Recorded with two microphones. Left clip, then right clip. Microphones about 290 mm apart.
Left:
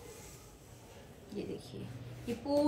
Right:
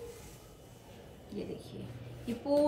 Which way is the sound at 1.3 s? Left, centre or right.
Centre.